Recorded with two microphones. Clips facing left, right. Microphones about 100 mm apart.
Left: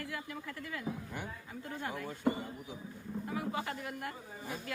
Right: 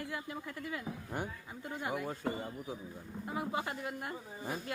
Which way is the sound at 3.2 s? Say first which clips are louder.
Right 1 dB; 25° right (ahead or behind).